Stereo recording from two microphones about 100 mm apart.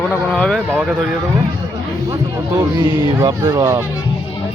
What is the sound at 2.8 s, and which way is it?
Speech, 50° right (ahead or behind).